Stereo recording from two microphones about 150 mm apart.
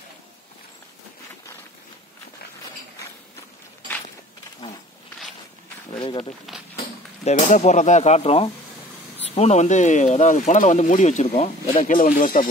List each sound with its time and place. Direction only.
5.9 s speech: 35° left (ahead or behind)
7.2 s speech: 55° left (ahead or behind)
11.8 s speech: 60° left (ahead or behind)